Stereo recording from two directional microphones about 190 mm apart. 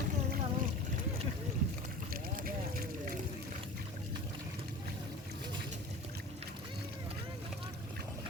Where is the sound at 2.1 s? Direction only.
50° right (ahead or behind).